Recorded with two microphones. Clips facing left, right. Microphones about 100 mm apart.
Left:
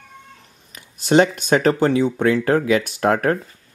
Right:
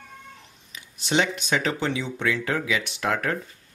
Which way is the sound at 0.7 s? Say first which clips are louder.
Left 9 dB; 45° left (ahead or behind).